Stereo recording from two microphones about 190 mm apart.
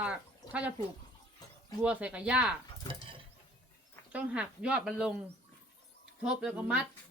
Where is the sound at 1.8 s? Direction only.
5° right (ahead or behind).